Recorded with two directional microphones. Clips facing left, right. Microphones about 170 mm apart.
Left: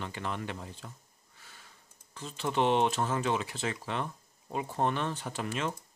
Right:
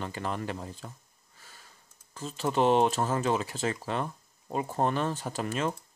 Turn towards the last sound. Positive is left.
turn(degrees=-40)  # may be behind; listen again after turning